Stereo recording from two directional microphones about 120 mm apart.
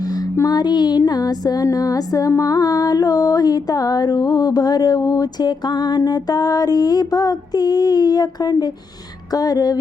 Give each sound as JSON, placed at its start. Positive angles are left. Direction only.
{"t": 0.0, "sound": "music", "side_deg": 35}